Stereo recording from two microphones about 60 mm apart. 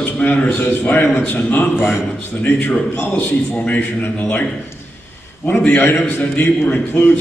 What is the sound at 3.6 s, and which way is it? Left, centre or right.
Speech, left.